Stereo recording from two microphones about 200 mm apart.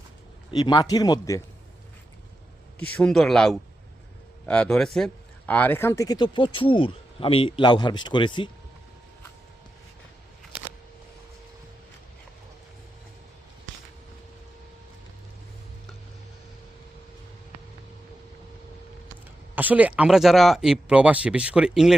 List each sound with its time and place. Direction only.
0.5 s speech: 20° left (ahead or behind)
2.7 s speech: 5° left (ahead or behind); by 8.4 s 25° left (ahead or behind)
19.5 s speech: 10° right (ahead or behind)